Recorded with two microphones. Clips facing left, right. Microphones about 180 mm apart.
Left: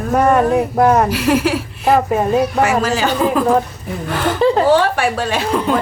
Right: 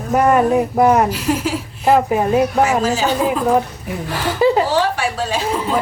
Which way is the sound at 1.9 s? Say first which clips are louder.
Even; 5° right (ahead or behind).